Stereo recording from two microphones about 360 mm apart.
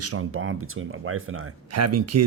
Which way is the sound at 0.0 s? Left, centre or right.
Right.